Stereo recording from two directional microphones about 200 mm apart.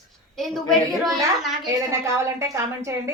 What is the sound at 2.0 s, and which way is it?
A woman's voice, 15° right (ahead or behind).